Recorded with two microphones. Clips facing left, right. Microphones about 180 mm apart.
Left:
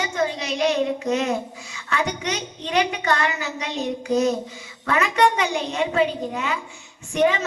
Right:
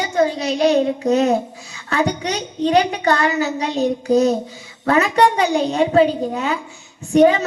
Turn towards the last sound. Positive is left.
turn(degrees=-35)  # may be behind; listen again after turning